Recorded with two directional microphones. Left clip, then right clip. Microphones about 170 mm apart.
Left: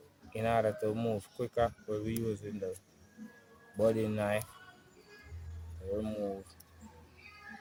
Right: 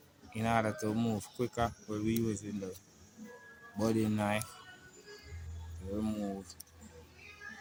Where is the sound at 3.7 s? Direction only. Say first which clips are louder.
Left 3 dB; 30° left (ahead or behind).